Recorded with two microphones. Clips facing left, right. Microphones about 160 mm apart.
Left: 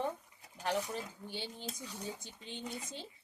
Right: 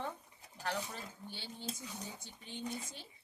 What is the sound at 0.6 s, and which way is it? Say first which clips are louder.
Speech: left 5 dB; 15° left (ahead or behind).